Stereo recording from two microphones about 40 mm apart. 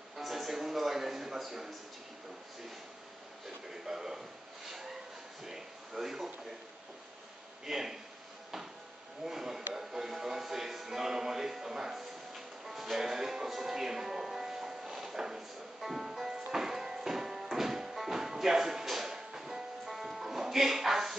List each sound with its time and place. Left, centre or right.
0.2 s music: centre
3.8 s a man's voice: centre
5.4 s speech: centre
7.6 s a man's voice: centre
9.2 s a sound: centre
9.8 s music: centre